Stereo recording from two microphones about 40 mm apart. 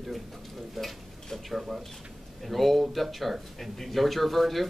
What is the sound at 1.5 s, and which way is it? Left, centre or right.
Speech, centre.